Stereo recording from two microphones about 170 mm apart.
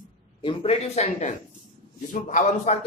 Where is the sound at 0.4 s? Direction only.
30° left (ahead or behind).